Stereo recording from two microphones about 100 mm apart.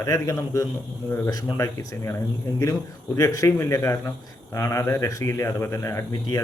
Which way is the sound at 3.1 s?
35° left (ahead or behind).